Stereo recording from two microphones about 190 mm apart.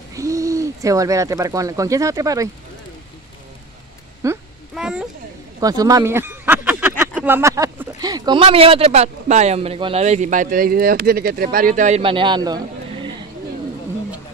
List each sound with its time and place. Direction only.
0.1 s speech: 15° right (ahead or behind)
4.2 s a sound: 15° right (ahead or behind)
4.7 s children playing: 5° right (ahead or behind)
5.6 s speech: 20° right (ahead or behind); by 12.0 s 40° right (ahead or behind)
12.0 s a man's voice: 25° right (ahead or behind)